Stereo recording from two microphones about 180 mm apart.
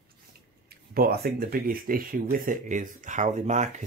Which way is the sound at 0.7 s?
60° right (ahead or behind).